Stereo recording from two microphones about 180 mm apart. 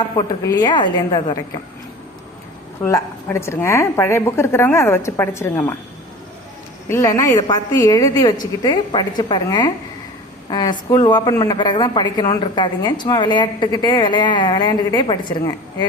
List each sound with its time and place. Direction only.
0.0 s a woman's voice: 20° left (ahead or behind)
2.8 s a woman's voice: 15° left (ahead or behind)
6.8 s a woman's voice: 15° left (ahead or behind)